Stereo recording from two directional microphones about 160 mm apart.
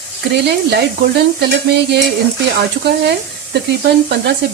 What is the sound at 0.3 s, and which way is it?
Speech, 90° right.